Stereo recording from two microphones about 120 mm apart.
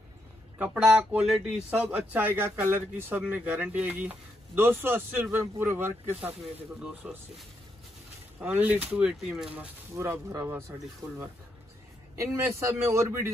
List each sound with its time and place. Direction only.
0.6 s speech: 10° right (ahead or behind)
6.4 s speech: 5° right (ahead or behind)
9.9 s a man's voice: 25° right (ahead or behind)
12.2 s a man's voice: 25° right (ahead or behind)